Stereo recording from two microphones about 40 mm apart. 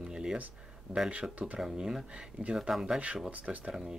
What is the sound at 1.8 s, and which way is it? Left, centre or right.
Speech, centre.